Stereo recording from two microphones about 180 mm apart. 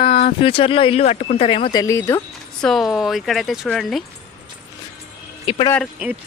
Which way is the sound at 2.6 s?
Centre (ahead or behind).